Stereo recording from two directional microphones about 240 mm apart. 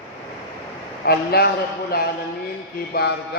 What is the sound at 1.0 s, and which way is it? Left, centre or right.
A man's voice, left.